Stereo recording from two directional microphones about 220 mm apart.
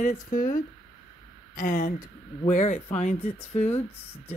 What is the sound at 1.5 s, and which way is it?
A woman's voice, 35° left (ahead or behind).